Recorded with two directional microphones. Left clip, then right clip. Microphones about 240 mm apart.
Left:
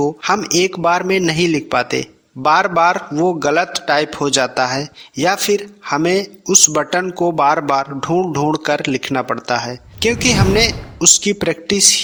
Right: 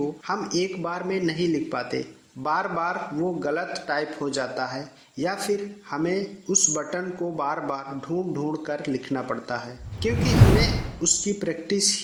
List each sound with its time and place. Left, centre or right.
0.0 s a man's voice: left